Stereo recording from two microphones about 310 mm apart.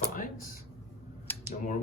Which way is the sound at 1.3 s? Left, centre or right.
Centre.